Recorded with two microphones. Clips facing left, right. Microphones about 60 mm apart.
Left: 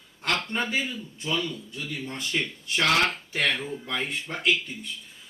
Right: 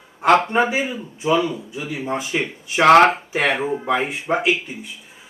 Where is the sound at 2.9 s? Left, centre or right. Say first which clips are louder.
Right 14 dB; right.